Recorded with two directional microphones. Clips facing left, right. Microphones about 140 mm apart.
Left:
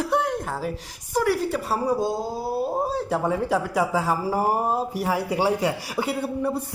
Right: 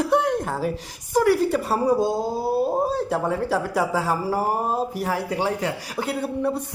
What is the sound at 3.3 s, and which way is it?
A man's voice, 15° left (ahead or behind).